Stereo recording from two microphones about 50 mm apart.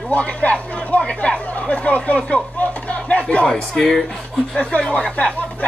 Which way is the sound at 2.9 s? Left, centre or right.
Left.